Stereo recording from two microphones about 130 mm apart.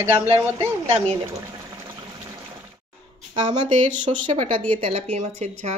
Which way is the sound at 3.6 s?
40° right (ahead or behind).